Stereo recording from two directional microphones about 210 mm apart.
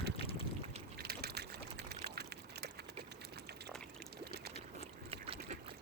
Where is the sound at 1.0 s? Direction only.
50° right (ahead or behind).